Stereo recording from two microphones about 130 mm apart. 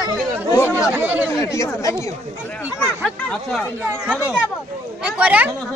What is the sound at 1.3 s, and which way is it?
Speech, 20° left (ahead or behind).